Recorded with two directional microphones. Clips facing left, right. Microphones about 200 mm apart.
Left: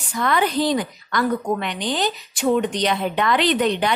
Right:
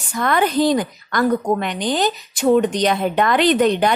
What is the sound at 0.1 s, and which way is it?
A woman's voice, 50° right (ahead or behind).